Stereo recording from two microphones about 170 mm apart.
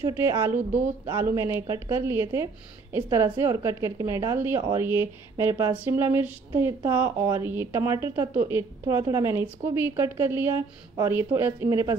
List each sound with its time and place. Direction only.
0.4 s speech: 15° right (ahead or behind)